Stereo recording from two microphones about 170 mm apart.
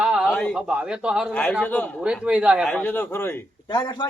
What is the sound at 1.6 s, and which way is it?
Speech, 10° left (ahead or behind).